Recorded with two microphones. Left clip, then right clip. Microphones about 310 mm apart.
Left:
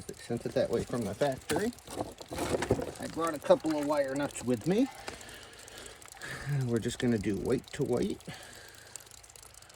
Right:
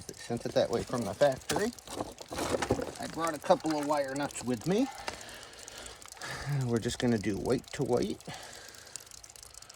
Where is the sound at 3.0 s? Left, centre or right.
Centre.